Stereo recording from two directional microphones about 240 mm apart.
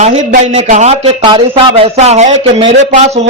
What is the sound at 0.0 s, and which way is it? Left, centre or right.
Speech, right.